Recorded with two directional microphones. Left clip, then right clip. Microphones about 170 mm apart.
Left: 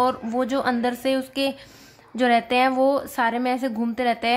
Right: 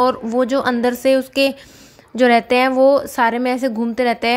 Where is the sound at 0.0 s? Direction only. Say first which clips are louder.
Right 6 dB; 25° right (ahead or behind).